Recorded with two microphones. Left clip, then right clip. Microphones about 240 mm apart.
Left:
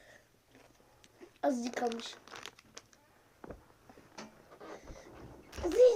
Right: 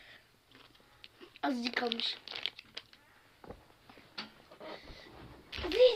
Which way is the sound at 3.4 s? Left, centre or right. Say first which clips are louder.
Left 1 dB; left.